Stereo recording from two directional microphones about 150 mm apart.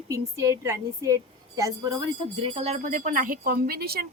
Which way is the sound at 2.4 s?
40° right (ahead or behind).